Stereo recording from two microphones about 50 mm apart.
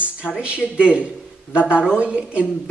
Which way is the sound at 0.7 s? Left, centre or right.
Right.